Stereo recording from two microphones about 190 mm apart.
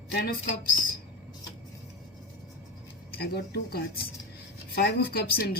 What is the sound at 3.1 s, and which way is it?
Speech, 55° left (ahead or behind).